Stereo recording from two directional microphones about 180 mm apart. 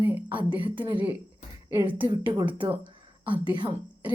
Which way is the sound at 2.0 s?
25° right (ahead or behind).